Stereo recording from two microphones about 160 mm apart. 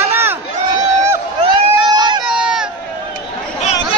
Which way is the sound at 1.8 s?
30° right (ahead or behind).